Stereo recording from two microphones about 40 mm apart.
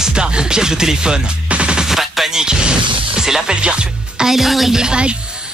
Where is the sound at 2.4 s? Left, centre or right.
Right.